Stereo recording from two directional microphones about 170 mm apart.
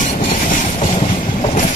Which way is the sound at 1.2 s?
40° left (ahead or behind).